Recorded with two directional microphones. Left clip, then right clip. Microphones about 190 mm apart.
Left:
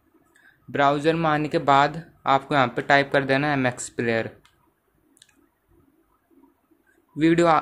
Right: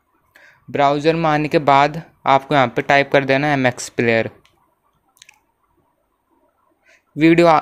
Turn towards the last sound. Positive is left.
turn(degrees=-25)  # may be behind; listen again after turning